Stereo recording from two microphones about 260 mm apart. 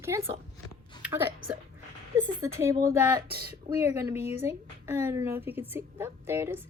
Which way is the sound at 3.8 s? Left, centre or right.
Centre.